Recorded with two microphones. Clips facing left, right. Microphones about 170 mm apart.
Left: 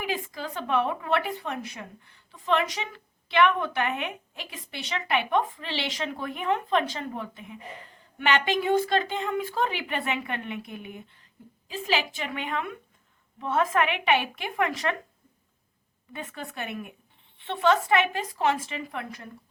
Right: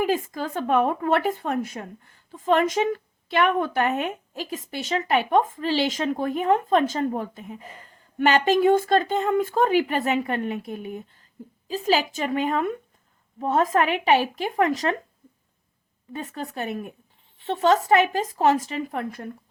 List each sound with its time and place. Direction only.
0.0 s speech: 45° right (ahead or behind)
16.1 s speech: 40° right (ahead or behind)